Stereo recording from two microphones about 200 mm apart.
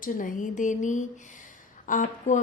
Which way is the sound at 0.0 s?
40° left (ahead or behind).